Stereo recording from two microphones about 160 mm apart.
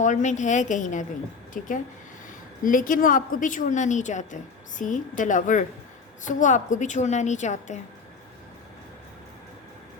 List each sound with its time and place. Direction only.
0.0 s a woman's voice: 50° left (ahead or behind)